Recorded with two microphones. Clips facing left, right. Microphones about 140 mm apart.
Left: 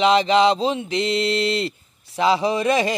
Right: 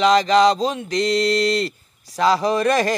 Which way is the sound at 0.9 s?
40° right (ahead or behind).